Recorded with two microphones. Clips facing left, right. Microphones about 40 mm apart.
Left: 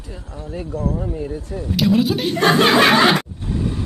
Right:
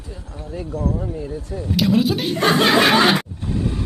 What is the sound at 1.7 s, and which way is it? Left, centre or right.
Speech, centre.